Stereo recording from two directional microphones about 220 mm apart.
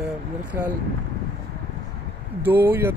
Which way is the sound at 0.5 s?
10° right (ahead or behind).